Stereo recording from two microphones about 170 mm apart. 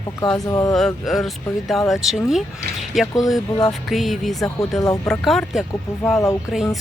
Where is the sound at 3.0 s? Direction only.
20° left (ahead or behind).